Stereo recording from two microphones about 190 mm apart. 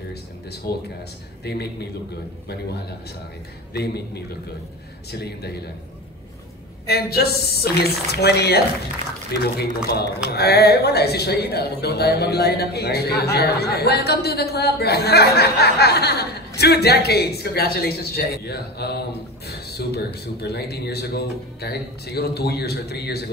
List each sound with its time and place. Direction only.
0.1 s speech: 55° left (ahead or behind)
3.7 s speech: 60° left (ahead or behind)
6.9 s speech: 55° left (ahead or behind)